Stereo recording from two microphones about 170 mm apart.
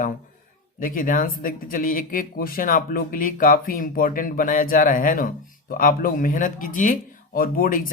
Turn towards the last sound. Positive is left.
turn(degrees=55)  # may be behind; listen again after turning